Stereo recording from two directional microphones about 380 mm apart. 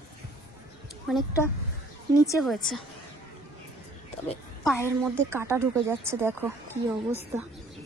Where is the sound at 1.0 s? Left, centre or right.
Centre.